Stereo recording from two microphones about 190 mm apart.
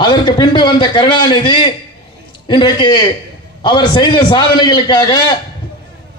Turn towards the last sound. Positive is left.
turn(degrees=20)  # may be behind; listen again after turning